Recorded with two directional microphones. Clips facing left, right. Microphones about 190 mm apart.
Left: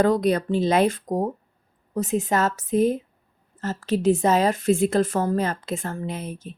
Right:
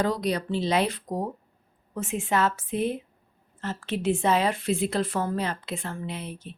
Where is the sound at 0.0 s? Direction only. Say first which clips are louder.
Left 6 dB; 50° left (ahead or behind).